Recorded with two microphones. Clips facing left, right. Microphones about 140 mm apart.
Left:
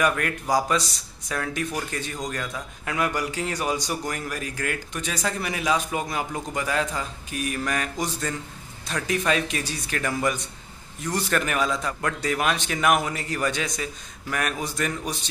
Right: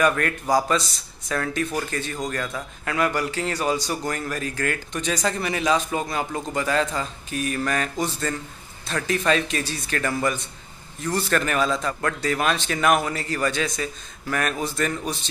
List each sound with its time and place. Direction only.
0.0 s a man's voice: 10° left (ahead or behind)